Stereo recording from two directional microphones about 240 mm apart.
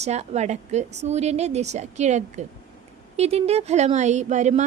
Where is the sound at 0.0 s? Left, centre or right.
Right.